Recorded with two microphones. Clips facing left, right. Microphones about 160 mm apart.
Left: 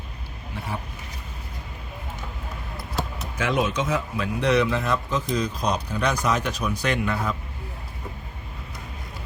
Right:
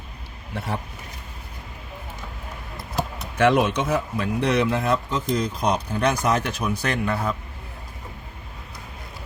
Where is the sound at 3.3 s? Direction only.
65° right (ahead or behind).